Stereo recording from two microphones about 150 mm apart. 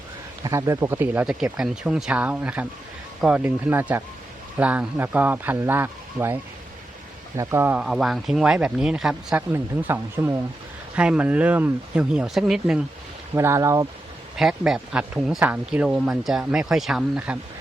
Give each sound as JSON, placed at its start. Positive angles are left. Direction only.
{"t": 0.4, "sound": "speech", "side_deg": -20}
{"t": 9.5, "sound": "speech", "side_deg": -15}
{"t": 13.3, "sound": "speech", "side_deg": -20}
{"t": 14.3, "sound": "speech", "side_deg": 0}